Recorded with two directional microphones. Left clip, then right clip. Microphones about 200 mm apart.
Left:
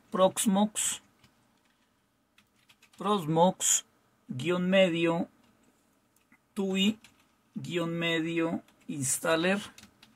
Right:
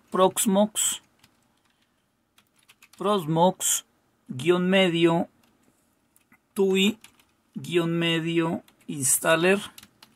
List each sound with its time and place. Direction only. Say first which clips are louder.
0.1 s speech: right 4 dB; 20° right (ahead or behind)
3.0 s speech: right 3 dB; 15° right (ahead or behind)
4.4 s speech: right 4 dB; 25° right (ahead or behind)
6.5 s speech: right 8 dB; 30° right (ahead or behind)